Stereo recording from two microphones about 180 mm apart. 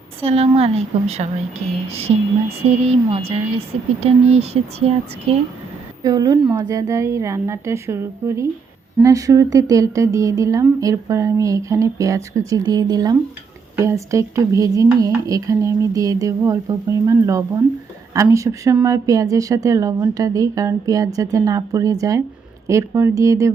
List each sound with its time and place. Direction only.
0.2 s speech: 35° right (ahead or behind)
6.0 s a woman's voice: 20° right (ahead or behind)